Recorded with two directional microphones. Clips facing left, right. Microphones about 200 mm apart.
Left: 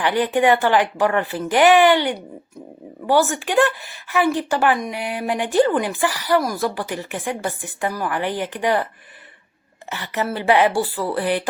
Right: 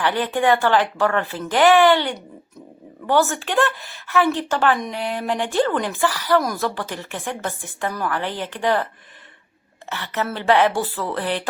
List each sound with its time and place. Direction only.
0.0 s speech: 15° left (ahead or behind)
9.9 s speech: 15° left (ahead or behind)